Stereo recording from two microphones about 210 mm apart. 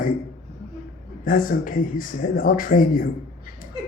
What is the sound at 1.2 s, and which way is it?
Speech, 40° left (ahead or behind).